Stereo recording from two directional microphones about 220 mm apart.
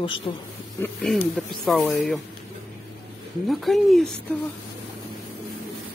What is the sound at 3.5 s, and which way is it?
Speech, centre (ahead or behind).